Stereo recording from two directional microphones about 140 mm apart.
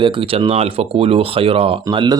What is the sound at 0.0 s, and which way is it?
Speech, 40° right (ahead or behind).